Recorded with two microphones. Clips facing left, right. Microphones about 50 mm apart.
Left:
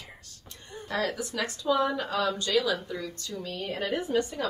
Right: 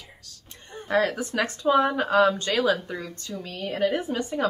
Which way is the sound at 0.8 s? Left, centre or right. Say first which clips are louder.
Right 7 dB; right.